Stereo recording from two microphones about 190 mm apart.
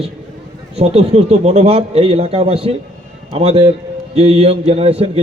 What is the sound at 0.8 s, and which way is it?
A man's voice, 35° right (ahead or behind).